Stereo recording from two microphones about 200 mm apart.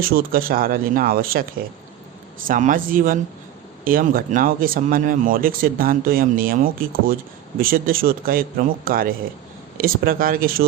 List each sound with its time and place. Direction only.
0.0 s speech: 45° right (ahead or behind)
2.5 s speech: 40° right (ahead or behind)